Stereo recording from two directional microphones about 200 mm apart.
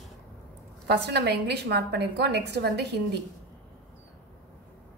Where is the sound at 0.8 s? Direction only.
55° right (ahead or behind).